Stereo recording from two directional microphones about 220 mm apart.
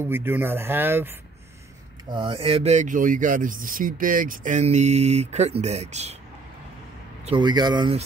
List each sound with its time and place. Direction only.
0.0 s speech: 10° right (ahead or behind)
2.0 s speech: 20° right (ahead or behind)
7.2 s speech: 20° right (ahead or behind)